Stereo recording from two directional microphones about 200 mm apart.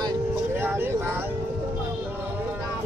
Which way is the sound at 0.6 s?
10° right (ahead or behind).